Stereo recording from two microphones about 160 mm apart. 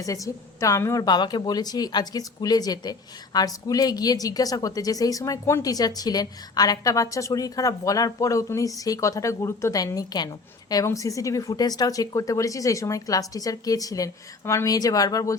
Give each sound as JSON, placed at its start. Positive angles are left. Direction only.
{"t": 0.0, "sound": "a woman's voice", "side_deg": 20}